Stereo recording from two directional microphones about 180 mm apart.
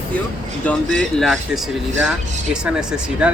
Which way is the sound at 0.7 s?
5° left (ahead or behind).